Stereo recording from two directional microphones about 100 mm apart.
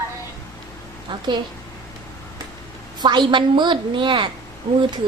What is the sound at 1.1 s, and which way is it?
Speech, 50° right (ahead or behind).